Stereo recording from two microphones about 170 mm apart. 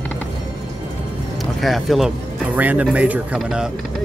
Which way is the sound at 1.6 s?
Centre (ahead or behind).